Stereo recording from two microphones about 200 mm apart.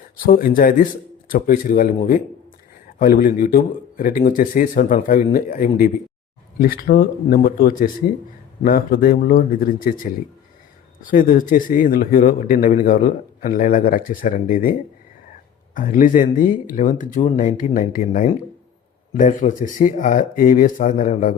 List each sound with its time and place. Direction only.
0.3 s a man's voice: 45° left (ahead or behind)
3.0 s a man's voice: 45° left (ahead or behind)